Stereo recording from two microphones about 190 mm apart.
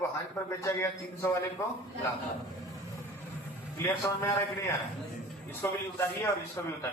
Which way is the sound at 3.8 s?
15° left (ahead or behind).